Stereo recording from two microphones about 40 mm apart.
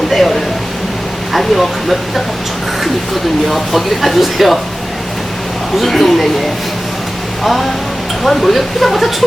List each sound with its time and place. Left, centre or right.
1.3 s speech: centre
3.5 s speech: centre
5.8 s speech: centre
8.2 s speech: centre